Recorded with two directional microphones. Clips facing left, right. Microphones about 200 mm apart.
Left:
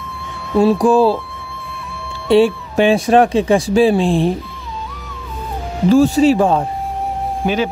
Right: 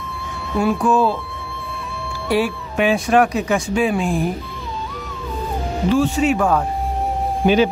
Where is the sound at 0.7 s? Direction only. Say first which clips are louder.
Left 5 dB; 35° left (ahead or behind).